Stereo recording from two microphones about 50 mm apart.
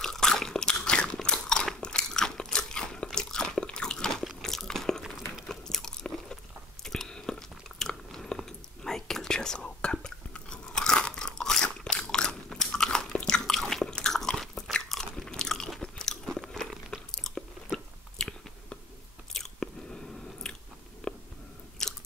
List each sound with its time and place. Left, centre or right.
0.0 s biting: centre
1.8 s crunch: centre
5.5 s a sound: centre
6.8 s biting: centre
13.5 s biting: centre
13.8 s biting: centre
15.8 s crunch: centre
16.3 s crunch: centre
16.9 s chewing: centre
20.4 s biting: centre
21.1 s a sound: centre
21.8 s biting: centre